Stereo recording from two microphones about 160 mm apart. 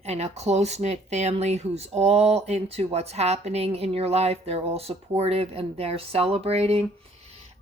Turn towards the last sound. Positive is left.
turn(degrees=-40)  # may be behind; listen again after turning